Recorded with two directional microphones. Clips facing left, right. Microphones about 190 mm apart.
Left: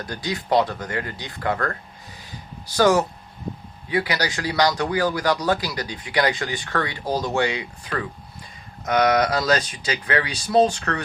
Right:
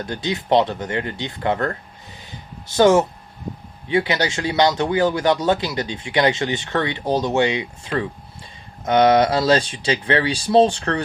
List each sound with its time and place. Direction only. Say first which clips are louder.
0.0 s speech: right 4 dB; 25° right (ahead or behind)
2.2 s a sound: even; 25° right (ahead or behind)
3.8 s speech: right 4 dB; 25° right (ahead or behind)